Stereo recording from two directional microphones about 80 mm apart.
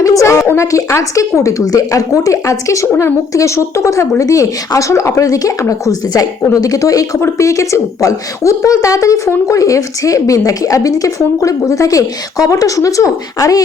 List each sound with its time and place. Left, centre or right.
0.0 s a woman's voice: left